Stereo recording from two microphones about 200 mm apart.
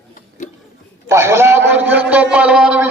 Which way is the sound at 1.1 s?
15° right (ahead or behind).